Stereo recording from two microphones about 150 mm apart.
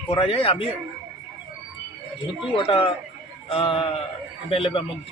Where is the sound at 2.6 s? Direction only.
35° left (ahead or behind).